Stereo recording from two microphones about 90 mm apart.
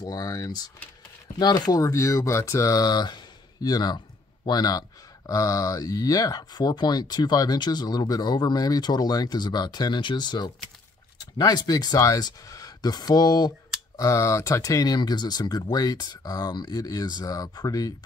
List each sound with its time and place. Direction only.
0.0 s speech: 45° left (ahead or behind)
1.8 s speech: 35° left (ahead or behind)
13.9 s speech: 35° left (ahead or behind)
15.0 s speech: 50° left (ahead or behind)